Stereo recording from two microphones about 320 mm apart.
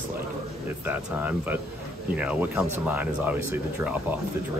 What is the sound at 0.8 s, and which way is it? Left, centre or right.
Speech, centre.